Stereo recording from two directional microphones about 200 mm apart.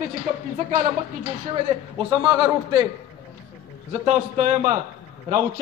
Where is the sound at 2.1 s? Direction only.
25° right (ahead or behind).